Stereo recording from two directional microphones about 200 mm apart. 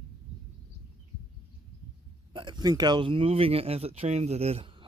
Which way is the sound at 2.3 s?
20° right (ahead or behind).